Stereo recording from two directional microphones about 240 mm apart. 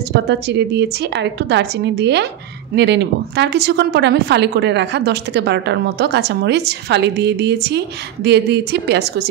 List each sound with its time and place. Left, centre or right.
0.1 s speech: right